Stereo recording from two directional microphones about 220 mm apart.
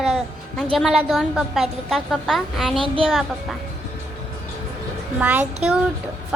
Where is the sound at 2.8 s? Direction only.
25° right (ahead or behind).